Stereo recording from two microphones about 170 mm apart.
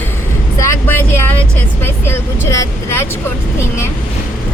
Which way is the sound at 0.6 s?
15° left (ahead or behind).